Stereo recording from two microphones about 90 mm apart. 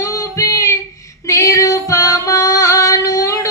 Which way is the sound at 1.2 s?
35° left (ahead or behind).